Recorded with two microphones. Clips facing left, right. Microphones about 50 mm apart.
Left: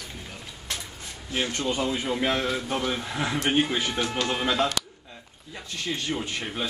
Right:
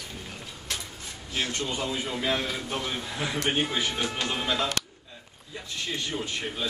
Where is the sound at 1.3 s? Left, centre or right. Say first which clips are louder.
Left 3 dB; left.